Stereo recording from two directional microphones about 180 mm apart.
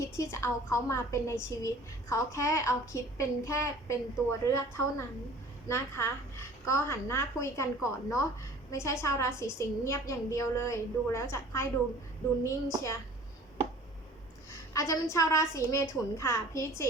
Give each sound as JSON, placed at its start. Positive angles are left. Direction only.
{"t": 0.0, "sound": "a woman's voice", "side_deg": 15}
{"t": 14.7, "sound": "a woman's voice", "side_deg": 15}